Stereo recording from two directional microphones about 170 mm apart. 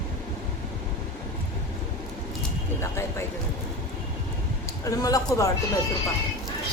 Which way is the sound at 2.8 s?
15° left (ahead or behind).